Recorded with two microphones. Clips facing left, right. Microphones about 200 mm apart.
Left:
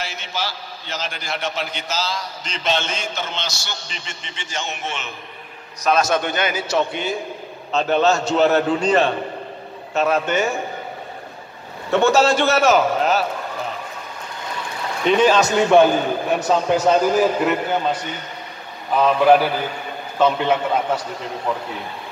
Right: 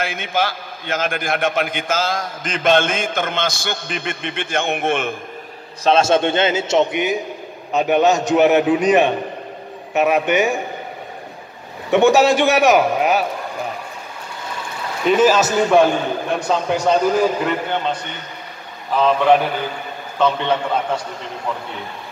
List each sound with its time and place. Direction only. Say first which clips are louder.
0.0 s a man's voice: right 7 dB; 55° right (ahead or behind)
5.9 s a man's voice: right 4 dB; 25° right (ahead or behind)
11.9 s a man's voice: right 3 dB; 15° right (ahead or behind)
15.0 s a man's voice: right 1 dB; 5° right (ahead or behind)
18.9 s a man's voice: even; 5° left (ahead or behind)